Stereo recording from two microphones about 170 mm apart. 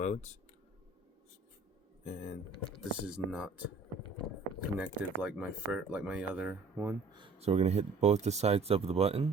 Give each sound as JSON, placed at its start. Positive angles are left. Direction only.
{"t": 0.0, "sound": "speech", "side_deg": 45}
{"t": 2.0, "sound": "speech", "side_deg": 40}
{"t": 2.7, "sound": "speech", "side_deg": -5}
{"t": 4.8, "sound": "speech", "side_deg": -5}
{"t": 7.1, "sound": "speech", "side_deg": -30}